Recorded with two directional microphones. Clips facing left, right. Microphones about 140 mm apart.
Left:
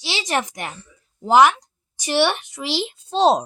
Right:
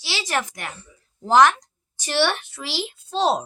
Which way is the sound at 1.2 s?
10° left (ahead or behind).